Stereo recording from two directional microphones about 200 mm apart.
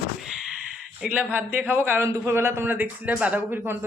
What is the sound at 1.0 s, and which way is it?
A man's voice, 5° right (ahead or behind).